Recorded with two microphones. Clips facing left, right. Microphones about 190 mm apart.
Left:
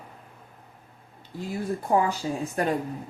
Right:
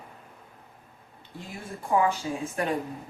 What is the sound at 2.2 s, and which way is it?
Speech, 30° left (ahead or behind).